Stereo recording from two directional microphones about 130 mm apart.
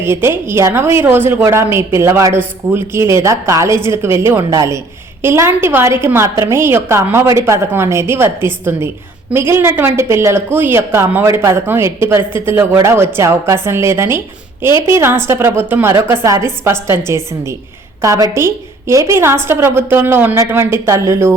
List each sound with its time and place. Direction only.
0.0 s speech: 20° right (ahead or behind)
18.0 s speech: 25° right (ahead or behind)